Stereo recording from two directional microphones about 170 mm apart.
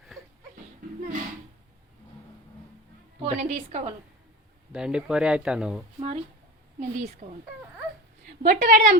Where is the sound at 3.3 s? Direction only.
45° right (ahead or behind).